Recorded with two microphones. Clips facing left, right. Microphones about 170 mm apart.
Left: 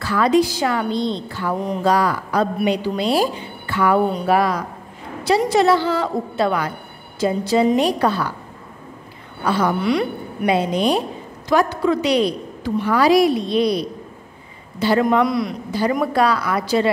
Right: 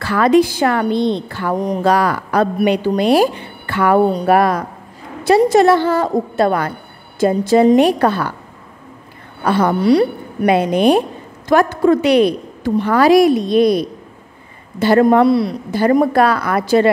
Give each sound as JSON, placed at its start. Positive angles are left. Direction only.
{"t": 0.0, "sound": "a woman's voice", "side_deg": -60}
{"t": 9.4, "sound": "a woman's voice", "side_deg": -55}
{"t": 9.8, "sound": "a woman's voice", "side_deg": -35}
{"t": 10.4, "sound": "a woman's voice", "side_deg": -60}
{"t": 15.2, "sound": "a woman's voice", "side_deg": -30}
{"t": 15.7, "sound": "a woman's voice", "side_deg": -55}